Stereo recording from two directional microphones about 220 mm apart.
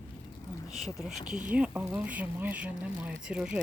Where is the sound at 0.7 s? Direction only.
Centre (ahead or behind).